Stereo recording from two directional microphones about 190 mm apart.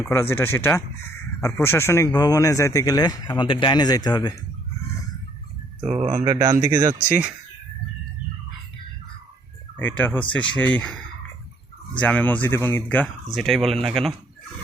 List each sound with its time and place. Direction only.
0.0 s speech: 10° left (ahead or behind)
5.8 s speech: 30° right (ahead or behind)
6.2 s speech: 15° right (ahead or behind)
9.7 s speech: 10° left (ahead or behind)
11.9 s speech: 5° left (ahead or behind)